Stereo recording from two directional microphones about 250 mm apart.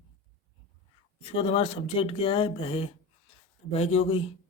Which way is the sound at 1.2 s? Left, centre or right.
Left.